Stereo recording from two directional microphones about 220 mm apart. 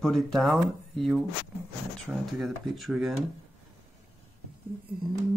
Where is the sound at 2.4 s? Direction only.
Centre (ahead or behind).